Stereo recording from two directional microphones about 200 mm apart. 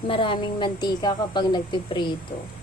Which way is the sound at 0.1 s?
25° left (ahead or behind).